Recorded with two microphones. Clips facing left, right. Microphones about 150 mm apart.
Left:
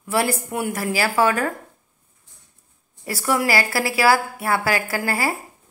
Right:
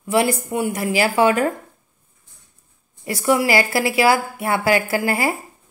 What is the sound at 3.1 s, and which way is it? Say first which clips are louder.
A woman's voice: right 3 dB; 15° right (ahead or behind).